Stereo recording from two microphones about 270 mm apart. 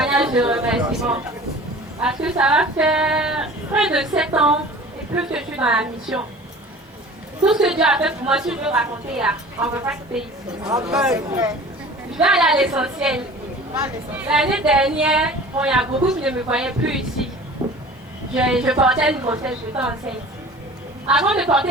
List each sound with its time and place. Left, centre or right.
0.0 s speech: centre
7.4 s speech: centre
10.6 s a man's voice: centre
10.9 s speech: centre
17.6 s a sound: centre
18.3 s speech: centre
21.1 s speech: centre